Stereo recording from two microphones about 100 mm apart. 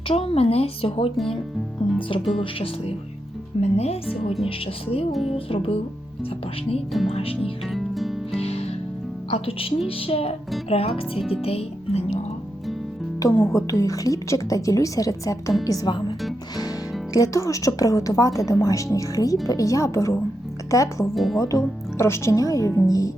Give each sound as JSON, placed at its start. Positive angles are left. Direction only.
{"t": 0.1, "sound": "speech", "side_deg": 75}
{"t": 3.6, "sound": "speech", "side_deg": 90}
{"t": 4.4, "sound": "speech", "side_deg": 70}
{"t": 7.1, "sound": "speech", "side_deg": 75}
{"t": 7.7, "sound": "music", "side_deg": 0}
{"t": 8.3, "sound": "music", "side_deg": 90}
{"t": 9.3, "sound": "speech", "side_deg": 70}
{"t": 11.2, "sound": "music", "side_deg": -5}
{"t": 11.4, "sound": "music", "side_deg": 85}
{"t": 13.1, "sound": "a woman's voice", "side_deg": 30}
{"t": 17.2, "sound": "a woman's voice", "side_deg": 35}
{"t": 21.2, "sound": "music", "side_deg": 0}
{"t": 21.4, "sound": "a woman's voice", "side_deg": 30}